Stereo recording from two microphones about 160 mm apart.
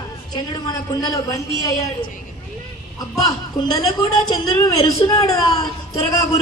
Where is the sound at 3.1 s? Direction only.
20° left (ahead or behind).